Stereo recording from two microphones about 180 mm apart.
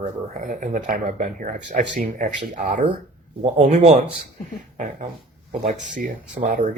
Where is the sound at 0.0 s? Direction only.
45° right (ahead or behind).